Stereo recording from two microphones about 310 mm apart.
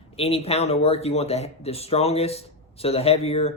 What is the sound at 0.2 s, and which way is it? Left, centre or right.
Speech, centre.